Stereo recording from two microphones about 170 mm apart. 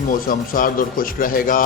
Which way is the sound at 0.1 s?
55° left (ahead or behind).